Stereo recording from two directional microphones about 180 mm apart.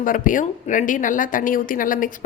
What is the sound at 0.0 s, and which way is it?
A woman's voice, 50° left (ahead or behind).